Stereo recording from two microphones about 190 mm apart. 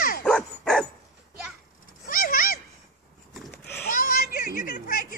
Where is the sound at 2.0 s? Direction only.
45° left (ahead or behind).